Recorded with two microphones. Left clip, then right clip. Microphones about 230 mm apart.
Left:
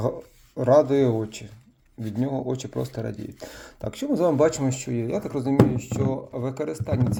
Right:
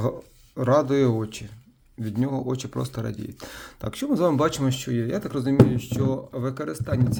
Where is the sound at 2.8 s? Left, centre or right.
Right.